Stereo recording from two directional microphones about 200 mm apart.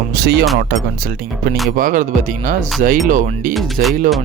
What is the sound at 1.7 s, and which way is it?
Speech, 40° right (ahead or behind).